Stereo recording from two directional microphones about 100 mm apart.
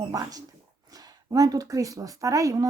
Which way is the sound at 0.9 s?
40° right (ahead or behind).